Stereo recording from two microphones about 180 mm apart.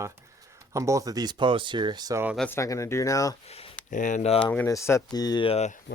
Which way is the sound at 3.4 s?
35° left (ahead or behind).